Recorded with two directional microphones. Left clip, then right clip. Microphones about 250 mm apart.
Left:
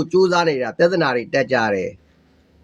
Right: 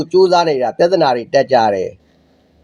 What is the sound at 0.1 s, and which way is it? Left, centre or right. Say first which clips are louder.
Speech: right 5 dB; centre.